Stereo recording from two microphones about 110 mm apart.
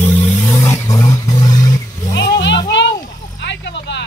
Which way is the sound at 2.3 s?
40° left (ahead or behind).